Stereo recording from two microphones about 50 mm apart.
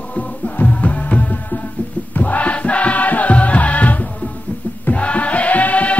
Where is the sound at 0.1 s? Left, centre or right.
Left.